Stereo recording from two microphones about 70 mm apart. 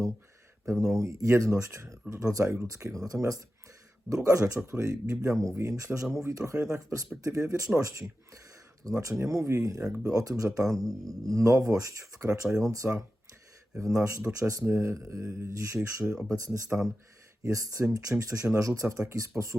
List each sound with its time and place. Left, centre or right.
0.6 s speech: right